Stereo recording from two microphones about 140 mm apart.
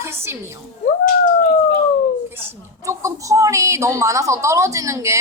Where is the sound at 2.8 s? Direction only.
25° right (ahead or behind).